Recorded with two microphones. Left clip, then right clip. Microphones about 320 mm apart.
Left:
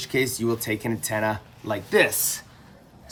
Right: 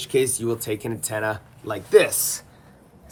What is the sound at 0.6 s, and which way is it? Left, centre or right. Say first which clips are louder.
Speech: even; left.